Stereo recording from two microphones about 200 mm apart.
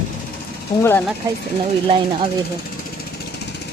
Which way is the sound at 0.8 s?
10° left (ahead or behind).